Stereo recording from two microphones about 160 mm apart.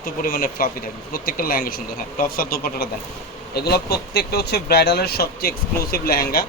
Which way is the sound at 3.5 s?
85° left.